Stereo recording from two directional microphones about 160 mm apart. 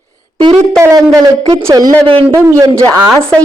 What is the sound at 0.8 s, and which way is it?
Speech, 20° right (ahead or behind).